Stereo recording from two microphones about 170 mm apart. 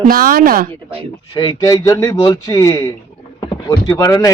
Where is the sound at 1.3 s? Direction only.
25° left (ahead or behind).